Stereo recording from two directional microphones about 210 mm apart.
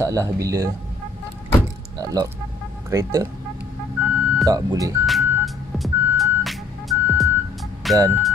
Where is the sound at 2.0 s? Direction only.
15° right (ahead or behind).